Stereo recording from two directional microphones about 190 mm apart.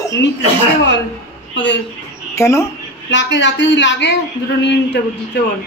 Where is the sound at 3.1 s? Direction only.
70° left (ahead or behind).